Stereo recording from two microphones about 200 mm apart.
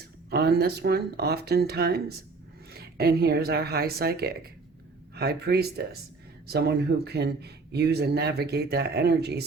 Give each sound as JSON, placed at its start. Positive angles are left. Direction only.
{"t": 0.3, "sound": "speech", "side_deg": -55}